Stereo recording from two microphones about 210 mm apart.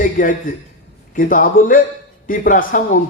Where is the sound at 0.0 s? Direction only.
40° left (ahead or behind).